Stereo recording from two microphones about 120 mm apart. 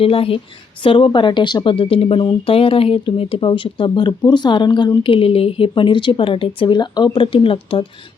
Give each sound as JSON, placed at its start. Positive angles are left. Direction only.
{"t": 0.0, "sound": "speech", "side_deg": 50}
{"t": 1.7, "sound": "speech", "side_deg": 50}